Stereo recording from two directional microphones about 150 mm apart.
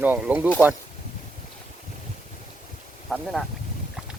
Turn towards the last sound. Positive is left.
turn(degrees=-5)  # may be behind; listen again after turning